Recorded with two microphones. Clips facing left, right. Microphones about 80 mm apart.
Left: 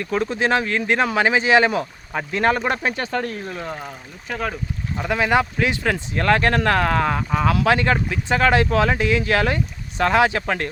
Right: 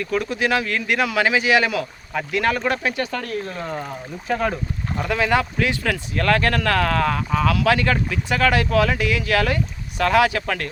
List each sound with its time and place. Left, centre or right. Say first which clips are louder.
0.0 s speech: left 1 dB; left
4.3 s speech: right 4 dB; centre
4.9 s speech: left 1 dB; left
7.4 s speech: left 1 dB; left